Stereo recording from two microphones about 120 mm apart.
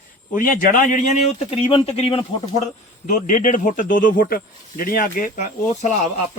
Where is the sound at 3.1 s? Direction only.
90° left.